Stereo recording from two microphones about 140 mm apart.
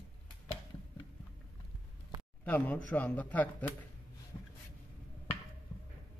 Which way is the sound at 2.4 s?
10° left (ahead or behind).